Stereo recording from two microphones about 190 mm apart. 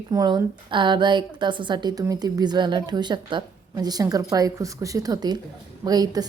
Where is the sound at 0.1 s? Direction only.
20° right (ahead or behind).